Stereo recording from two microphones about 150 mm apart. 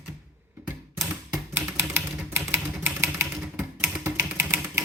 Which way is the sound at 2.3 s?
15° right (ahead or behind).